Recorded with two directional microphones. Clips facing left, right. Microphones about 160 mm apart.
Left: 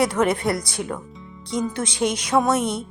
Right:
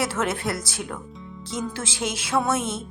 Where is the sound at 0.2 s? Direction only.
15° left (ahead or behind).